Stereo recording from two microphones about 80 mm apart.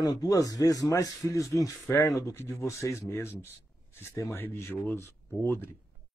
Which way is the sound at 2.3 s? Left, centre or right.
Left.